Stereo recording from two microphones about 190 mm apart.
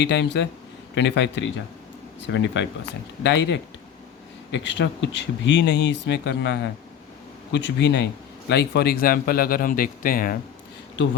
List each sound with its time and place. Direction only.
0.0 s speech: 70° left (ahead or behind); by 10.3 s 50° left (ahead or behind)
10.9 s speech: 80° left